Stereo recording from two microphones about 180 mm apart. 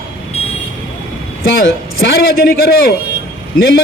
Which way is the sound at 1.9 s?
60° left (ahead or behind).